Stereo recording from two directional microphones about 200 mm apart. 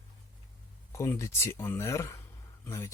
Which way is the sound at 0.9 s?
15° left (ahead or behind).